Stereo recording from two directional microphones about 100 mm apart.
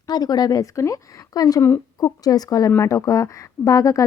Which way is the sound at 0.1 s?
40° left (ahead or behind).